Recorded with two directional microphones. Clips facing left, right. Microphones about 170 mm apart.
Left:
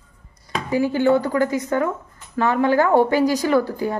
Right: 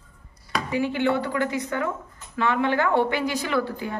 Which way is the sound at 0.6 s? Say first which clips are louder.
Left 6 dB; 40° left (ahead or behind).